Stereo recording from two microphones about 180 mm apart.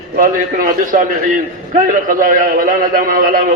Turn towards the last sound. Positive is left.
turn(degrees=-50)  # may be behind; listen again after turning